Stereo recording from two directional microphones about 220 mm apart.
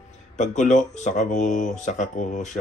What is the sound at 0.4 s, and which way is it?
Speech, 35° left (ahead or behind).